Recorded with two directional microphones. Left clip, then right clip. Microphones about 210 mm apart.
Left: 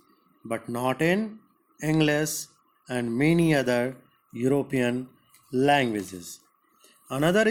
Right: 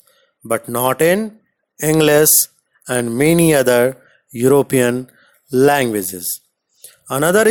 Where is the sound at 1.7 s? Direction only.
50° right (ahead or behind).